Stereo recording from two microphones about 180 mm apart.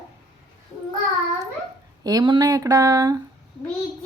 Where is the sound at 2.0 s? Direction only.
25° right (ahead or behind).